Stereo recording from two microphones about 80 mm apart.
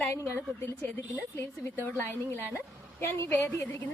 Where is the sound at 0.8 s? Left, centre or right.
Left.